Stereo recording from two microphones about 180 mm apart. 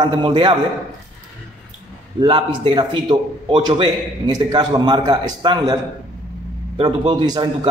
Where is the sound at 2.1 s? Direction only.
30° right (ahead or behind).